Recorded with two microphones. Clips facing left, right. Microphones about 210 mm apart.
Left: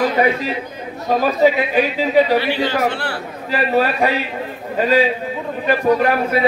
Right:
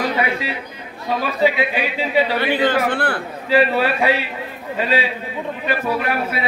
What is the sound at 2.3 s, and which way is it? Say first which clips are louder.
Speech: even; 50° right (ahead or behind).